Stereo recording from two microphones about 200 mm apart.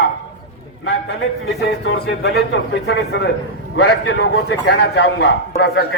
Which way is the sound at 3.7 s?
70° left (ahead or behind).